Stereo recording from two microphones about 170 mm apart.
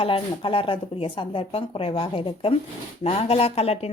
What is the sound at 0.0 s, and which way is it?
Speech, 30° left (ahead or behind).